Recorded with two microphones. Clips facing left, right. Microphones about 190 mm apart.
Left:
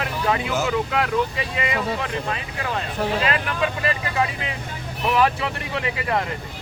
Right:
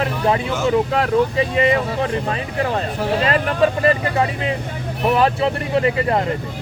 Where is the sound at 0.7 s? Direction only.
35° right (ahead or behind).